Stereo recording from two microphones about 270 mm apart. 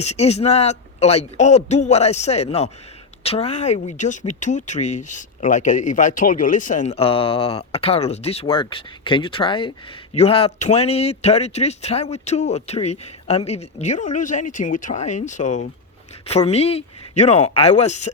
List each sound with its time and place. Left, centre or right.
0.0 s speech: left